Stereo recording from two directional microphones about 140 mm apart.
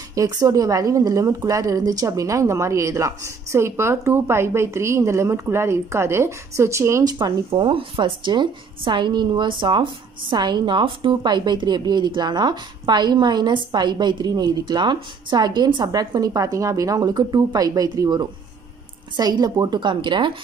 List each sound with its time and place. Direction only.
0.1 s a woman's voice: 25° right (ahead or behind)